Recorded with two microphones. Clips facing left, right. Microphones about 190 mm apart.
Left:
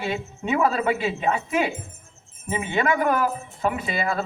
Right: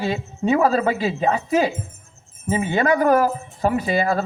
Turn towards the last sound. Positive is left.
turn(degrees=-40)  # may be behind; listen again after turning